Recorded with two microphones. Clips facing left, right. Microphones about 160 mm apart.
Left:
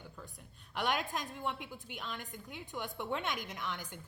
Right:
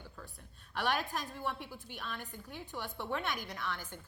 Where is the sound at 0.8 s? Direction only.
15° left (ahead or behind).